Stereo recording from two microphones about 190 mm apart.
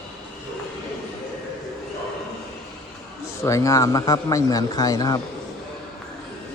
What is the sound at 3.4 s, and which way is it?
Speech, 15° left (ahead or behind).